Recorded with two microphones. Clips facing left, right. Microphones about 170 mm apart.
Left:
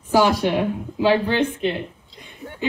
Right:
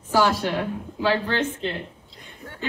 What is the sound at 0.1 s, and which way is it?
Speech, 15° left (ahead or behind).